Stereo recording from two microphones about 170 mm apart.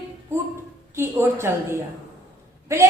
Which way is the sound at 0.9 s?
15° right (ahead or behind).